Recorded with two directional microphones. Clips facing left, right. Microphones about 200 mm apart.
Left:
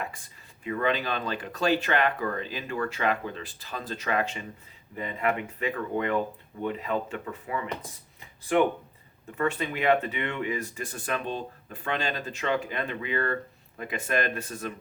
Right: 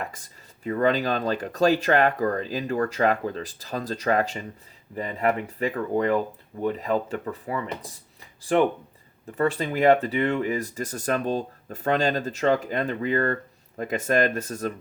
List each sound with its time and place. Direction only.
0.0 s speech: 40° right (ahead or behind)
9.4 s speech: 35° right (ahead or behind)